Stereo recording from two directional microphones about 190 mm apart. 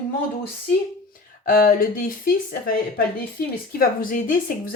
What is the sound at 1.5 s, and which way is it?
Speech, 50° left (ahead or behind).